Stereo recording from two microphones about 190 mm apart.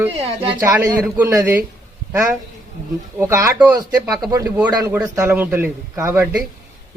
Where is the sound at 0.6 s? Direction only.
15° right (ahead or behind).